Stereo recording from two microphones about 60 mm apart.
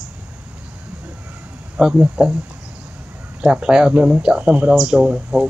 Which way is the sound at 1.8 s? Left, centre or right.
Centre.